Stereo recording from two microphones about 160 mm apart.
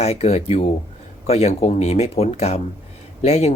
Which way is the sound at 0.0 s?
40° left (ahead or behind).